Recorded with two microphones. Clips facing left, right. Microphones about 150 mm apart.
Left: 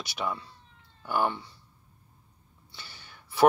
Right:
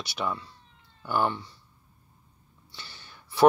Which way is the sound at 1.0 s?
15° left (ahead or behind).